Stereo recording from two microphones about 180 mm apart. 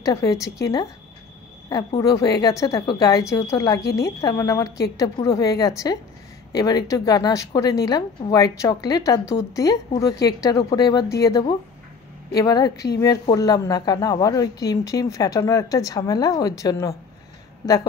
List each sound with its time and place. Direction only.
0.0 s speech: 20° left (ahead or behind)
2.0 s a woman's voice: 20° left (ahead or behind)